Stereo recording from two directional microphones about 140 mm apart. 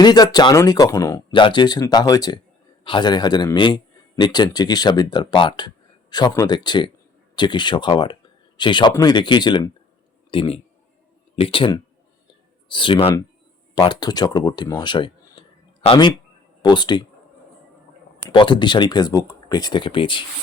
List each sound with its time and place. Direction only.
0.0 s a man's voice: 30° left (ahead or behind)
18.3 s speech: 35° left (ahead or behind)